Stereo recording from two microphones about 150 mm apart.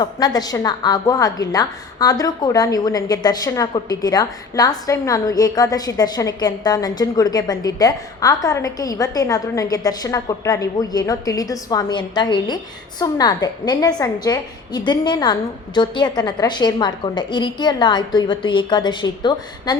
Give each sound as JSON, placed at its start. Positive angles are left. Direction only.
{"t": 0.0, "sound": "a woman's voice", "side_deg": 25}